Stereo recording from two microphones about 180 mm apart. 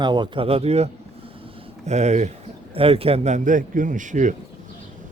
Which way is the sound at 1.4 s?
40° right (ahead or behind).